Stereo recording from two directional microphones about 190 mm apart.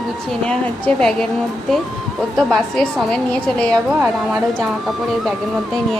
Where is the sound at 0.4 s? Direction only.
5° left (ahead or behind).